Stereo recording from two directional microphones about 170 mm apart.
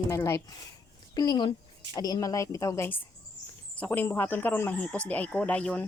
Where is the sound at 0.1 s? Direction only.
20° left (ahead or behind).